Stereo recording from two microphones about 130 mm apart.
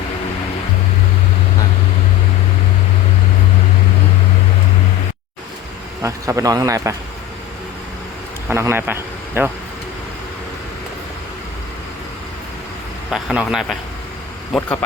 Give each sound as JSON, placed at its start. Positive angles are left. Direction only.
{"t": 6.0, "sound": "a man's voice", "side_deg": -25}
{"t": 8.4, "sound": "speech", "side_deg": -20}
{"t": 13.1, "sound": "a man's voice", "side_deg": 0}